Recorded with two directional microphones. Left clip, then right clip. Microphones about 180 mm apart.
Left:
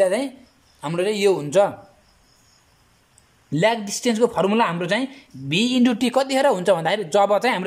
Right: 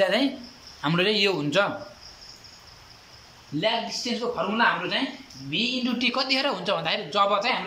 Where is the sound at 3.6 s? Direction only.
55° left (ahead or behind).